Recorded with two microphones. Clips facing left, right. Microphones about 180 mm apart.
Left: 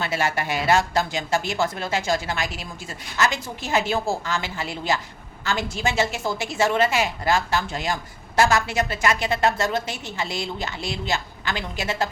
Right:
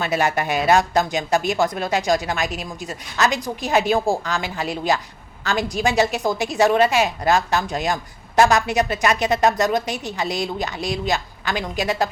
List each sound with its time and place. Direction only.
0.0 s a woman's voice: 20° right (ahead or behind)